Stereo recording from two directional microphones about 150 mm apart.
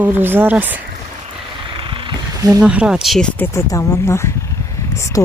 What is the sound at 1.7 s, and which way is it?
Wild animals, 35° right (ahead or behind).